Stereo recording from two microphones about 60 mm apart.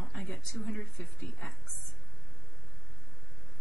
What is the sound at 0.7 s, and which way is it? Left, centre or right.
Speech, left.